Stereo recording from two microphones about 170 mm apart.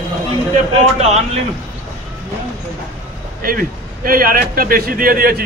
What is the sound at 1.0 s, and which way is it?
Speech, 40° right (ahead or behind).